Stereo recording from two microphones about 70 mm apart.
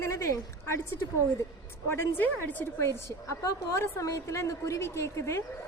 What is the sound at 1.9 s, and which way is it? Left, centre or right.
A woman's voice, left.